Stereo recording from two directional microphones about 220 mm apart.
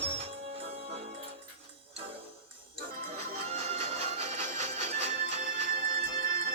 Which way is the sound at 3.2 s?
30° right (ahead or behind).